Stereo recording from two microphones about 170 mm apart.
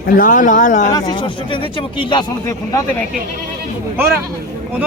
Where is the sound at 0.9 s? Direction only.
25° left (ahead or behind).